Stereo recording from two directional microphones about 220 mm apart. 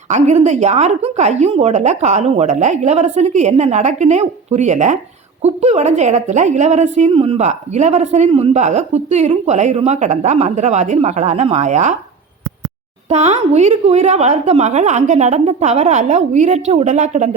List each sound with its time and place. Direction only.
0.1 s a woman's voice: 30° right (ahead or behind)
13.1 s a woman's voice: 30° right (ahead or behind)